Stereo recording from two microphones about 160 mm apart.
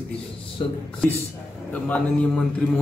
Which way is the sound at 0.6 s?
35° left (ahead or behind).